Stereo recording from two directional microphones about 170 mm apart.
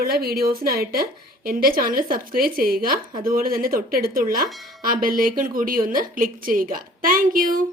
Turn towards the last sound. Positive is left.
turn(degrees=-55)  # may be behind; listen again after turning